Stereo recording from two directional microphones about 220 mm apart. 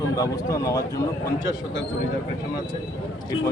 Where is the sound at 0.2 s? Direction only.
15° left (ahead or behind).